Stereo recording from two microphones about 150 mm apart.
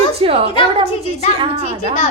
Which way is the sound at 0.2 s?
40° right (ahead or behind).